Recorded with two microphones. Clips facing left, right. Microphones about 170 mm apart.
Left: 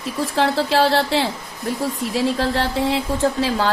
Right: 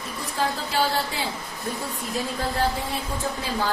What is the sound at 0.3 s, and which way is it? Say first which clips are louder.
A woman's voice: left 7 dB; 85° left.